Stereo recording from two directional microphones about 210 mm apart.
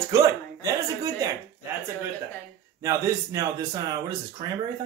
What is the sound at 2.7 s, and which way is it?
Speech, 15° right (ahead or behind).